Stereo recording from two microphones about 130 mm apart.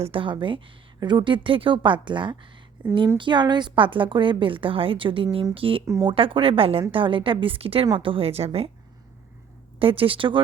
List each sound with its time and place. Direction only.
0.0 s a woman's voice: 40° right (ahead or behind)
2.8 s a woman's voice: 10° right (ahead or behind)
3.2 s a woman's voice: 35° right (ahead or behind)
5.8 s speech: 25° right (ahead or behind)
6.1 s a woman's voice: 45° right (ahead or behind)
9.7 s a woman's voice: 45° right (ahead or behind)